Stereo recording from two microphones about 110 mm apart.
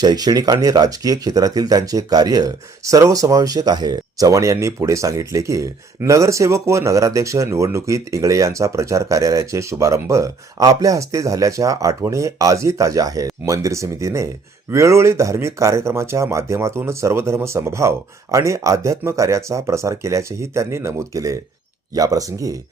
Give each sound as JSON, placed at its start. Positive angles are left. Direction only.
{"t": 0.0, "sound": "speech", "side_deg": -40}